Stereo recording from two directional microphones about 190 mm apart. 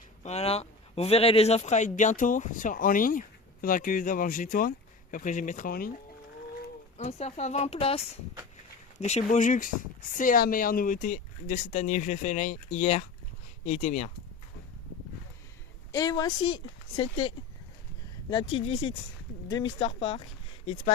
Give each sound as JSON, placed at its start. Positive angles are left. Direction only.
{"t": 0.2, "sound": "speech", "side_deg": 35}
{"t": 6.9, "sound": "speech", "side_deg": 35}
{"t": 15.9, "sound": "a woman's voice", "side_deg": 15}